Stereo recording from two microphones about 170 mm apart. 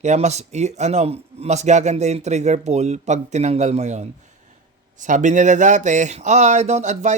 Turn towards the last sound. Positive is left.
turn(degrees=-45)  # may be behind; listen again after turning